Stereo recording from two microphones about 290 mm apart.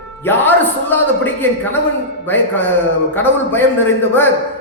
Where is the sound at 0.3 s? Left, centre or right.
Centre.